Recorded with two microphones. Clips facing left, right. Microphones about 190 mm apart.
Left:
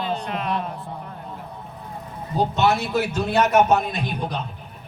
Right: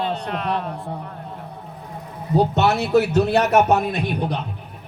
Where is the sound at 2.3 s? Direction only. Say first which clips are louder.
Right 2 dB; 65° right (ahead or behind).